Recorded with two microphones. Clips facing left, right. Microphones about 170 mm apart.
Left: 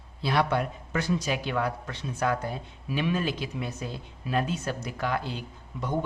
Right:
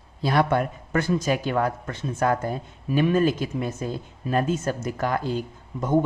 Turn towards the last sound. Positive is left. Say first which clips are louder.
# right 8 dB
turn(degrees=-45)  # may be behind; listen again after turning